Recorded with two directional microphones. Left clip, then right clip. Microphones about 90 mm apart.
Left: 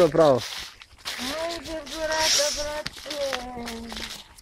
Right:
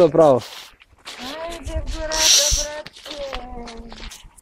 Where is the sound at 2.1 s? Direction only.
60° right (ahead or behind).